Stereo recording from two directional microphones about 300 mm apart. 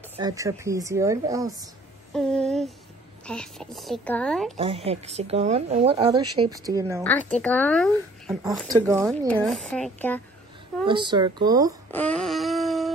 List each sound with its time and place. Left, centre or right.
0.2 s speech: centre
2.1 s speech: centre
4.6 s a woman's voice: centre
7.0 s speech: centre
9.5 s speech: centre
10.9 s speech: centre
11.9 s a sound: centre